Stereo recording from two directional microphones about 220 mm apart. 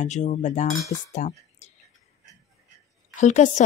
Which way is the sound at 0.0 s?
35° left (ahead or behind).